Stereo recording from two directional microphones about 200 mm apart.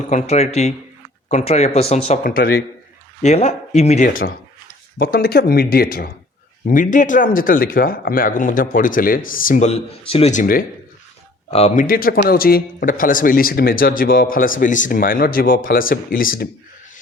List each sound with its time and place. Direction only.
0.1 s speech: 35° left (ahead or behind)
2.2 s speech: 45° left (ahead or behind)
3.2 s speech: 35° left (ahead or behind)
10.4 s speech: 45° left (ahead or behind)
11.5 s speech: 35° left (ahead or behind)